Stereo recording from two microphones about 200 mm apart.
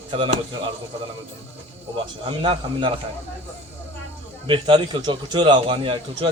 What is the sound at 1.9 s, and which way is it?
Speech, 25° right (ahead or behind).